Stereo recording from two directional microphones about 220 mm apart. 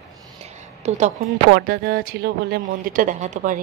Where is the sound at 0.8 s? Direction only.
30° right (ahead or behind).